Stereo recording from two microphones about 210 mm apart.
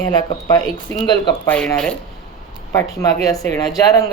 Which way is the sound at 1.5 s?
5° left (ahead or behind).